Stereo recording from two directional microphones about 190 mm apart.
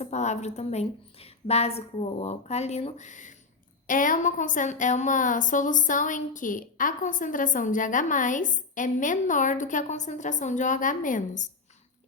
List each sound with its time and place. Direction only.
0.0 s a woman's voice: 35° left (ahead or behind)